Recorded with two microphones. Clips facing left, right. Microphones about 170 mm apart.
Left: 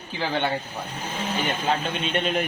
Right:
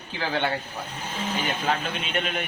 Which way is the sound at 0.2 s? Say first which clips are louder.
Left 1 dB; 15° left (ahead or behind).